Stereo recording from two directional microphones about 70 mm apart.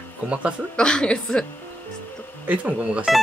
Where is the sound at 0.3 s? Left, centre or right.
Centre.